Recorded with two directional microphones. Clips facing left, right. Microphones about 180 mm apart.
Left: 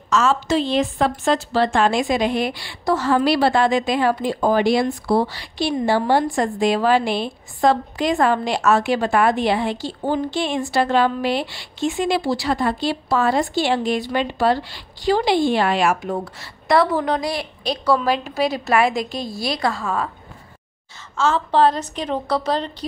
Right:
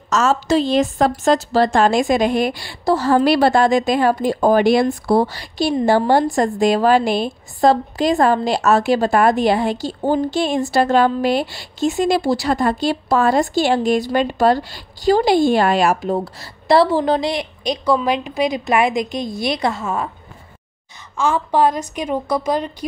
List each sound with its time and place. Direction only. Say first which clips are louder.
0.1 s a woman's voice: right 2 dB; 40° right (ahead or behind)
2.8 s a woman's voice: right 3 dB; 35° right (ahead or behind)
3.3 s a woman's voice: right 3 dB; 45° right (ahead or behind); by 20.1 s 20° right (ahead or behind)
21.2 s a woman's voice: even; 15° right (ahead or behind)